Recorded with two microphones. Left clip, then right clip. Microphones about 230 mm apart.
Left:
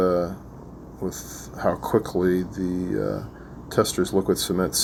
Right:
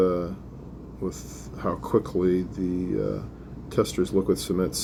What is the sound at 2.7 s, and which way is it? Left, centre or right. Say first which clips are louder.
Speech: left 1 dB; left.